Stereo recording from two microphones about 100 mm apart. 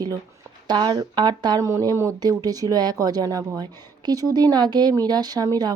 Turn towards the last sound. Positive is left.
turn(degrees=-40)  # may be behind; listen again after turning